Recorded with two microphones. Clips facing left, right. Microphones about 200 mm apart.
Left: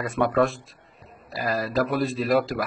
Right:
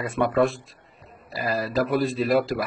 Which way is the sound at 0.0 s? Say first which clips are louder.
Even; centre (ahead or behind).